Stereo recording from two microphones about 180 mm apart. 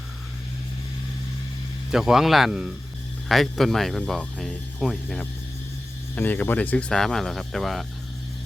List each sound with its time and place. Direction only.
1.9 s speech: centre (ahead or behind)